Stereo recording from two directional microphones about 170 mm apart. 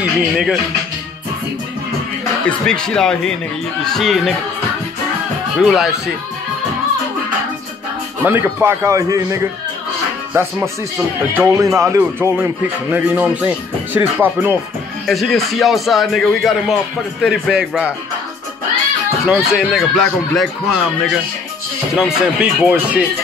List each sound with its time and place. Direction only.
0.0 s speech: 5° right (ahead or behind)
2.4 s speech: 5° left (ahead or behind)
5.6 s speech: centre (ahead or behind)
8.2 s speech: 10° right (ahead or behind)
11.3 s speech: 15° right (ahead or behind)
15.0 s speech: centre (ahead or behind)
19.2 s speech: 5° right (ahead or behind)